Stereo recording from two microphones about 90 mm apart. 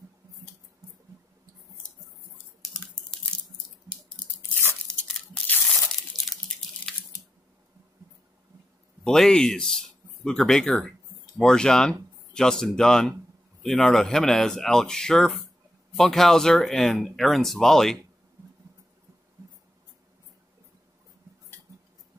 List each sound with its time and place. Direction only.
4.6 s tearing: 25° left (ahead or behind)
6.9 s a sound: 5° left (ahead or behind)
9.0 s speech: 5° left (ahead or behind)